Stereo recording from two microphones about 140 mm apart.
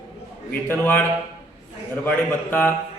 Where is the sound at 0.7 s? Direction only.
15° left (ahead or behind).